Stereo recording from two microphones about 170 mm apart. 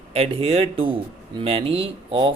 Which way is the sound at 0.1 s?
35° right (ahead or behind).